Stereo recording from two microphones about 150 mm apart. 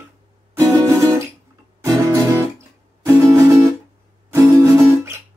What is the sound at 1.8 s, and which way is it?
Guitar, 20° right (ahead or behind).